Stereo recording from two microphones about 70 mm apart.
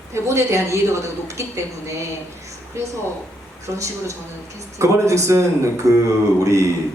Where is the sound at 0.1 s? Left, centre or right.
Right.